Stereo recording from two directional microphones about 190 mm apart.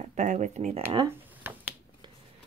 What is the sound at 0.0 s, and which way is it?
Speech, 40° right (ahead or behind).